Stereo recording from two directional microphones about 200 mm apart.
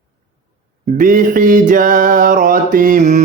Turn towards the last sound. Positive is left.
turn(degrees=-40)  # may be behind; listen again after turning